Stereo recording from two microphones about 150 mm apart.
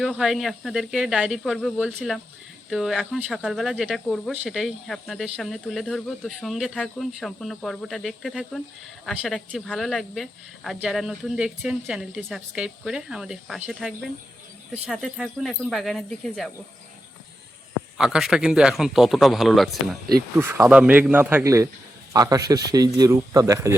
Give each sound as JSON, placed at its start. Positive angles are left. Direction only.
{"t": 0.0, "sound": "speech", "side_deg": 0}
{"t": 17.9, "sound": "speech", "side_deg": -5}
{"t": 20.3, "sound": "speech", "side_deg": -15}